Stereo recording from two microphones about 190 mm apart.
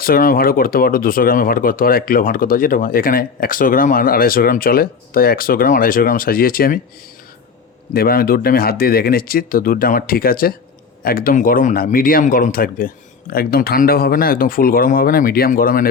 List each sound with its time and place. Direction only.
0.0 s speech: 45° left (ahead or behind)
7.9 s speech: 50° left (ahead or behind)